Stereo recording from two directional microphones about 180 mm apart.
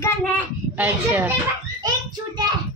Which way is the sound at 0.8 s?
10° right (ahead or behind).